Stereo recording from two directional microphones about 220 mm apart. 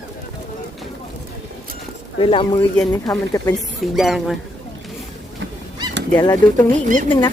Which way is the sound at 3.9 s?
Centre (ahead or behind).